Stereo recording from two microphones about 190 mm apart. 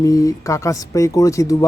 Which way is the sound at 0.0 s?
20° left (ahead or behind).